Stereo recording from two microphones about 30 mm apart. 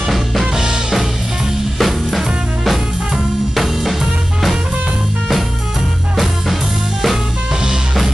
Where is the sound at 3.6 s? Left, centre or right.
Centre.